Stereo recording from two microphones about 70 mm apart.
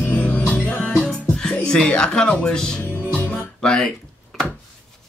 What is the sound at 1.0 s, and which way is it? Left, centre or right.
Music, centre.